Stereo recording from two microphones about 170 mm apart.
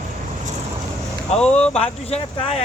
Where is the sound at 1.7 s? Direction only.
35° left (ahead or behind).